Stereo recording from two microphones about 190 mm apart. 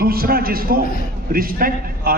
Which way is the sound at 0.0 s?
50° right (ahead or behind).